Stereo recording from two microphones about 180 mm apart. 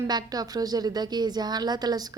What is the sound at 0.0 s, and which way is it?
A woman's voice, 20° right (ahead or behind).